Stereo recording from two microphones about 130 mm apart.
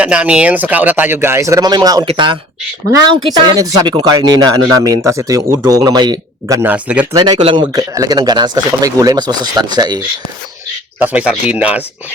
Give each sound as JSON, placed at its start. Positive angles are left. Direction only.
{"t": 0.0, "sound": "speech", "side_deg": -10}
{"t": 3.6, "sound": "speech", "side_deg": -30}
{"t": 6.6, "sound": "speech", "side_deg": -10}
{"t": 7.1, "sound": "speech", "side_deg": -30}
{"t": 7.7, "sound": "speech", "side_deg": -25}
{"t": 11.0, "sound": "speech", "side_deg": -10}